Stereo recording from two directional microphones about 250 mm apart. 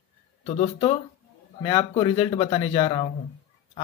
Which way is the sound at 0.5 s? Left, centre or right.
Left.